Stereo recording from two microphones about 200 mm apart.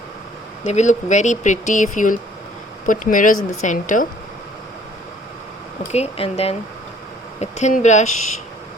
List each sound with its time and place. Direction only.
0.7 s speech: 35° left (ahead or behind)
5.9 s speech: 30° left (ahead or behind)